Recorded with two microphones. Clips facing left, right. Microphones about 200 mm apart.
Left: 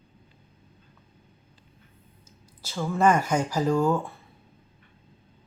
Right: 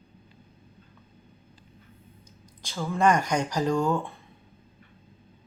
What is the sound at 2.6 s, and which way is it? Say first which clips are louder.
Speech: left 1 dB; 5° left (ahead or behind).